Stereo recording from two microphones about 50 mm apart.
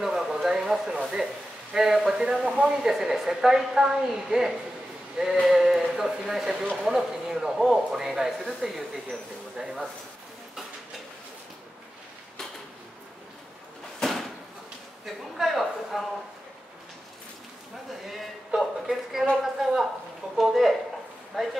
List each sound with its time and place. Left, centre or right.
0.0 s a sound: centre
2.0 s speech: centre
5.1 s sheep: centre
5.4 s speech: centre
15.3 s speech: centre
18.5 s speech: centre